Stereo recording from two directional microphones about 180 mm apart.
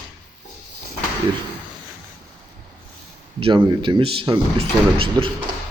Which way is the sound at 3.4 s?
25° right (ahead or behind).